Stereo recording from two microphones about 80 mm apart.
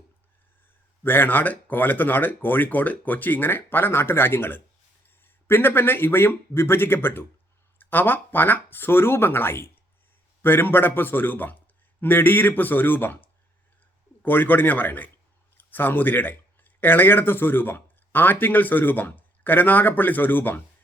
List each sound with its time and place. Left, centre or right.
1.0 s a man's voice: left